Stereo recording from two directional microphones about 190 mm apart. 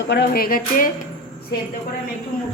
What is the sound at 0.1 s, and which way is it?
Speech, 55° left (ahead or behind).